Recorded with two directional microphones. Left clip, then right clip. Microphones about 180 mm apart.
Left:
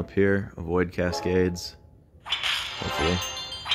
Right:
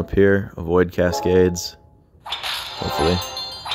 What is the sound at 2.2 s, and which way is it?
Music, centre (ahead or behind).